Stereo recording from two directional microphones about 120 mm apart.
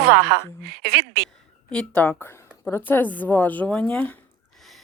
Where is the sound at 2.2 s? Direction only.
20° left (ahead or behind).